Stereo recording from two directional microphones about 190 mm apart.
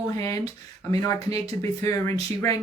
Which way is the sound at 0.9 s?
15° left (ahead or behind).